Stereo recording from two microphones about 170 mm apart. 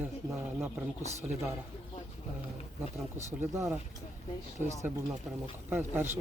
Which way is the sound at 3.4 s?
15° right (ahead or behind).